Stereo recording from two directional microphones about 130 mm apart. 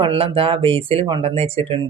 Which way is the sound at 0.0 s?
45° right (ahead or behind).